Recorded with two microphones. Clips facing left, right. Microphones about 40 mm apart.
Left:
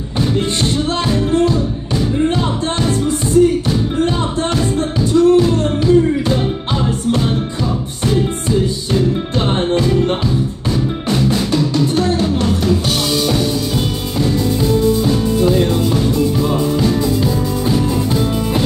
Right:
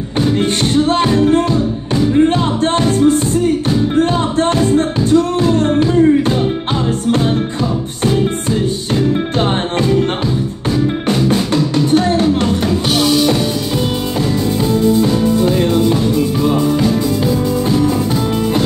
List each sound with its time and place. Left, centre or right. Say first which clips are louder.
0.9 s music: right 2 dB; right
5.3 s music: even; right
11.7 s music: right 3 dB; right